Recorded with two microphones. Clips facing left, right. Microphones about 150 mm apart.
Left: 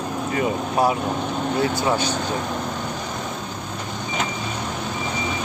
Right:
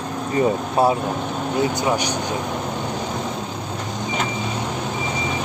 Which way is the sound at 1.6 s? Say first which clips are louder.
Right 2 dB; 15° right (ahead or behind).